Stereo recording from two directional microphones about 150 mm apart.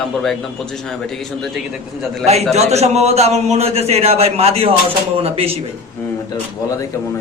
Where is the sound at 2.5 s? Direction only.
45° right (ahead or behind).